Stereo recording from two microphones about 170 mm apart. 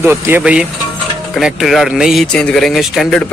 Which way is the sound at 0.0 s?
15° right (ahead or behind).